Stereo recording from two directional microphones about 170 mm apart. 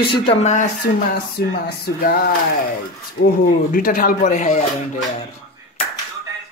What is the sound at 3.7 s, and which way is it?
Speech, 55° left (ahead or behind).